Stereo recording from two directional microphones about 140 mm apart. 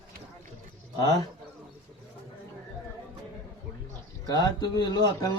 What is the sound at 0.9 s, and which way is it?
Speech, 25° left (ahead or behind).